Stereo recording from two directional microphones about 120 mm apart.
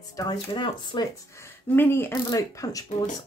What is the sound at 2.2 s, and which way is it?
Speech, 30° left (ahead or behind).